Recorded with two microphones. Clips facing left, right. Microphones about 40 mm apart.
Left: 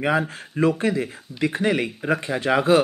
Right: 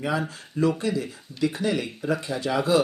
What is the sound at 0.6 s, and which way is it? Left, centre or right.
Speech, left.